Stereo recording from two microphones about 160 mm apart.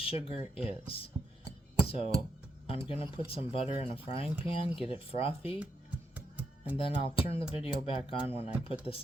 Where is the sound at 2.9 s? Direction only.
35° left (ahead or behind).